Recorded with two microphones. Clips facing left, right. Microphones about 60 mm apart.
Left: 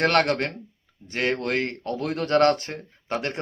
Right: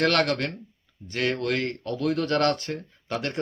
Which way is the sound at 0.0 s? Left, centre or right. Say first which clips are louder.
Left 2 dB; left.